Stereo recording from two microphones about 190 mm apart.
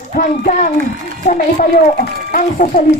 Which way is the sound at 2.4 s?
45° left (ahead or behind).